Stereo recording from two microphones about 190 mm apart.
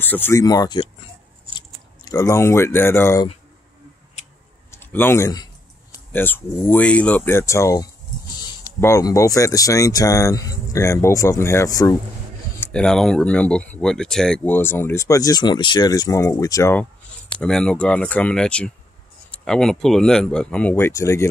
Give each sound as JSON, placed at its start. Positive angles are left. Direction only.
{"t": 0.0, "sound": "speech", "side_deg": 10}
{"t": 2.0, "sound": "speech", "side_deg": 15}
{"t": 4.6, "sound": "speech", "side_deg": 10}
{"t": 8.8, "sound": "speech", "side_deg": 15}
{"t": 12.5, "sound": "speech", "side_deg": 5}
{"t": 17.4, "sound": "speech", "side_deg": 5}